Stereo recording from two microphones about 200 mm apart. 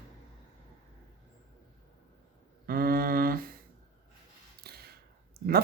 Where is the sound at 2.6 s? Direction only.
50° right (ahead or behind).